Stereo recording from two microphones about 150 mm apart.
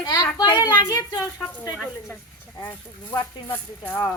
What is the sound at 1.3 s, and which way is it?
Speech, 10° left (ahead or behind).